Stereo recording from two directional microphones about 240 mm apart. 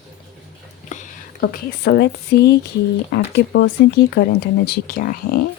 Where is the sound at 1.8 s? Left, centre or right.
Left.